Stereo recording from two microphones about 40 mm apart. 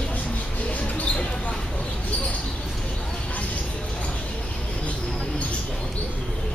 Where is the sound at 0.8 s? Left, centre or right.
Left.